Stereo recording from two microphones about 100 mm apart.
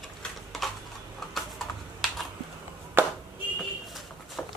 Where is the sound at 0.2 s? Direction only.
Centre (ahead or behind).